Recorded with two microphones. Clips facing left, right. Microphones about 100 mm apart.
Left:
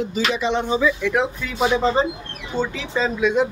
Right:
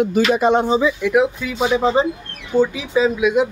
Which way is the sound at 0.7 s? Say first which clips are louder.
Right 3 dB; 20° right (ahead or behind).